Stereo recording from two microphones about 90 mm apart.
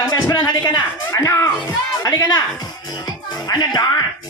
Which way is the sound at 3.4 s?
50° left (ahead or behind).